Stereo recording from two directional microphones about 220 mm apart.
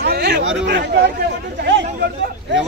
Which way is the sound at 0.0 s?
45° right (ahead or behind).